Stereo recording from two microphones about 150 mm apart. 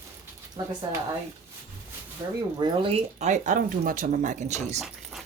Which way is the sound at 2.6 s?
35° right (ahead or behind).